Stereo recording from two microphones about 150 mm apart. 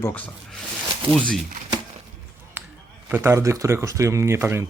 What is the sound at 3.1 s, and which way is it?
Speech, 15° right (ahead or behind).